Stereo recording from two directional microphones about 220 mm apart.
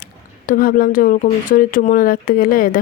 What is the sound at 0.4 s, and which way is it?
Speech, 40° left (ahead or behind).